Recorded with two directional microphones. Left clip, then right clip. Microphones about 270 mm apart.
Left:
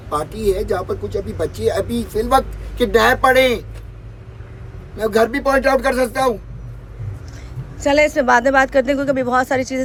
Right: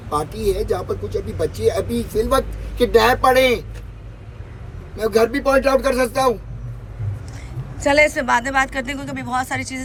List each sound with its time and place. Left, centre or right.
0.1 s speech: centre
4.9 s speech: centre
7.8 s speech: centre